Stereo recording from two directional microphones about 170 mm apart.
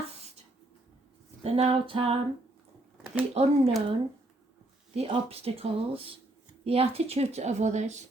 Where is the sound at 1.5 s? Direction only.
35° right (ahead or behind).